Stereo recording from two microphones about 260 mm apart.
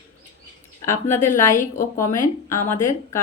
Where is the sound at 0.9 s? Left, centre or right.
Centre.